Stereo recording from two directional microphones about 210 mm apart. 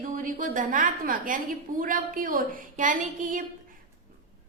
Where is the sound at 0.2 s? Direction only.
40° right (ahead or behind).